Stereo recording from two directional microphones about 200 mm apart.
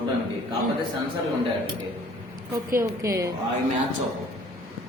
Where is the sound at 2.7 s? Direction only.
15° right (ahead or behind).